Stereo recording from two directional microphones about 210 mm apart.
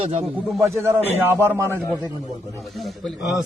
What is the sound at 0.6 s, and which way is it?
A man's voice, 10° right (ahead or behind).